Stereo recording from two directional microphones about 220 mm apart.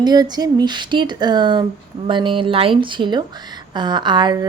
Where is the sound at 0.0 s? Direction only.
20° right (ahead or behind).